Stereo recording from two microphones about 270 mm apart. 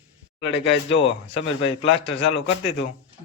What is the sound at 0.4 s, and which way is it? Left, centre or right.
Speech, left.